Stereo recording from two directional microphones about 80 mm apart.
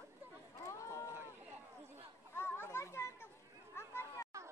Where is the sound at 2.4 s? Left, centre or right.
Left.